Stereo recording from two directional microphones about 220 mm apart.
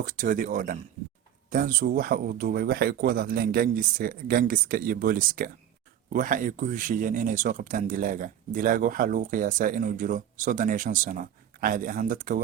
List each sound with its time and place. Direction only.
0.0 s speech: 35° right (ahead or behind)